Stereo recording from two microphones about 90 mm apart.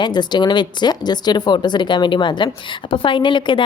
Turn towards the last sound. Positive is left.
turn(degrees=60)  # may be behind; listen again after turning